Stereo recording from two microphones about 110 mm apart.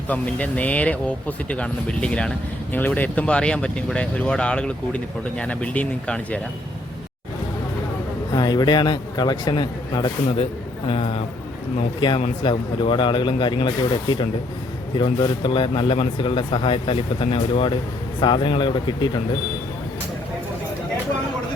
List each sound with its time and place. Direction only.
0.1 s speech: 15° left (ahead or behind)
8.4 s a man's voice: 40° left (ahead or behind)
10.8 s speech: 60° left (ahead or behind)
11.9 s speech: 45° left (ahead or behind)